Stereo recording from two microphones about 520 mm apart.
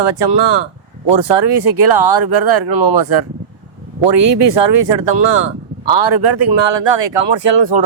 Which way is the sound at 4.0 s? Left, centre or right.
Right.